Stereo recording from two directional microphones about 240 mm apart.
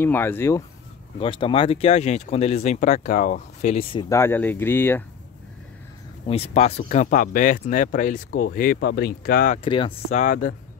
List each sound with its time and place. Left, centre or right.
0.0 s speech: centre
6.2 s speech: left
9.7 s speech: left